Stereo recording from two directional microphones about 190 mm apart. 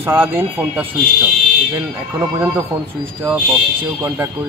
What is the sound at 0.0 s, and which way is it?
Speech, 10° right (ahead or behind).